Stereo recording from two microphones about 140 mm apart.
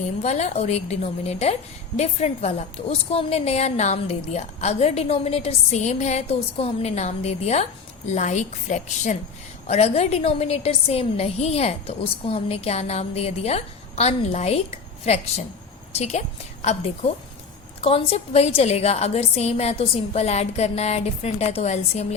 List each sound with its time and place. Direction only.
0.2 s a woman's voice: 55° left (ahead or behind)
9.6 s a woman's voice: 50° left (ahead or behind)
16.7 s a woman's voice: 50° left (ahead or behind)
17.8 s a woman's voice: 45° left (ahead or behind)